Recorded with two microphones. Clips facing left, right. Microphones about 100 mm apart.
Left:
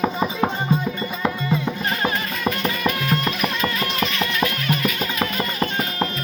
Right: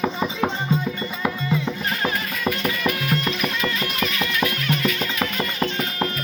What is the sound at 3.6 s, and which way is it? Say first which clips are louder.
Music: left 2 dB; 25° left (ahead or behind).